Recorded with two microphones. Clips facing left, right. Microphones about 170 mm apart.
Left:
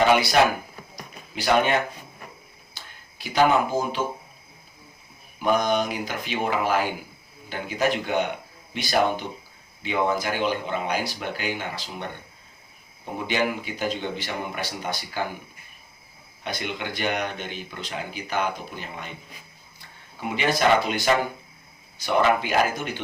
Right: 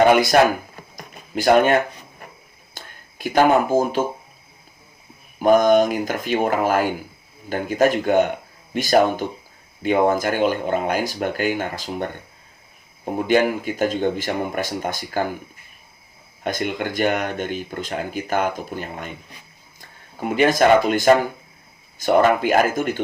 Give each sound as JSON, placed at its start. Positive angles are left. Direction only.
{"t": 0.0, "sound": "speech", "side_deg": -50}
{"t": 5.4, "sound": "speech", "side_deg": -45}
{"t": 13.2, "sound": "speech", "side_deg": -50}
{"t": 16.4, "sound": "speech", "side_deg": -45}